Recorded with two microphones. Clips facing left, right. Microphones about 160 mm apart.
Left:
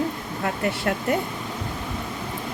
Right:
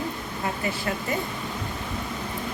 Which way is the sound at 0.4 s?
65° left (ahead or behind).